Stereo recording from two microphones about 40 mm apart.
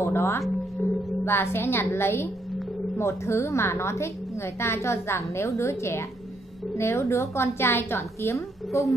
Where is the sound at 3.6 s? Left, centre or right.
Left.